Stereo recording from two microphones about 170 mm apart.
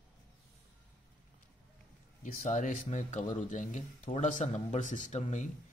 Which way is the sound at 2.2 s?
45° left (ahead or behind).